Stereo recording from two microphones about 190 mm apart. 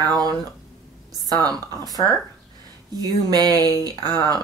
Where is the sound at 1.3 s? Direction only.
20° right (ahead or behind).